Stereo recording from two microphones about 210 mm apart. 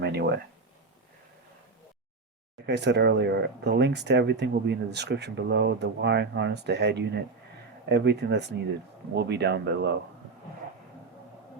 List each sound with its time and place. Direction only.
0.0 s speech: 55° right (ahead or behind)
2.6 s speech: 55° right (ahead or behind)